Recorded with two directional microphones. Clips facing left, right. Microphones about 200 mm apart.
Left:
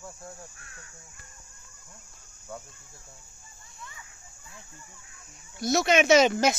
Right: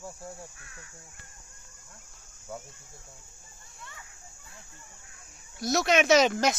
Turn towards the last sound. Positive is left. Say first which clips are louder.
# left 2 dB
turn(degrees=0)  # may be behind; listen again after turning